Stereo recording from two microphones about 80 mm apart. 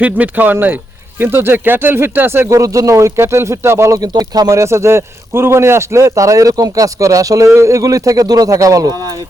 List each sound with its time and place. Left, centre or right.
0.0 s speech: right
2.5 s speech: right
4.0 s a man's voice: right
4.5 s a man's voice: right